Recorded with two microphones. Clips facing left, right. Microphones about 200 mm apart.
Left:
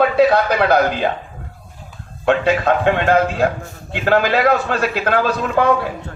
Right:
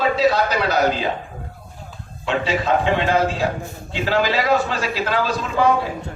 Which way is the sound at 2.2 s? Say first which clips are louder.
Left 5 dB; 55° left (ahead or behind).